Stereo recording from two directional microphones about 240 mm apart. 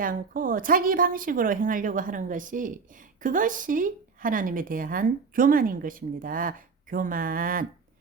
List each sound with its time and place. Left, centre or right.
0.0 s speech: right